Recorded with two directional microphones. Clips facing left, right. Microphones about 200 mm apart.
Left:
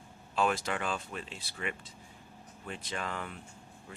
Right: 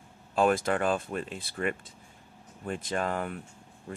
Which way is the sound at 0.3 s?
50° right (ahead or behind).